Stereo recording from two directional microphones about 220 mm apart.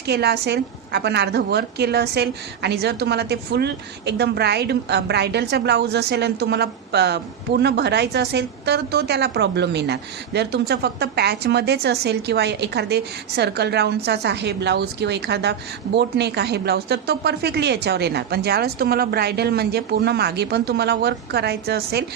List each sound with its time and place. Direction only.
0.1 s a woman's voice: 50° right (ahead or behind)